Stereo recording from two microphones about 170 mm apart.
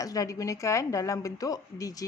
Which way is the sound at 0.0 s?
20° left (ahead or behind).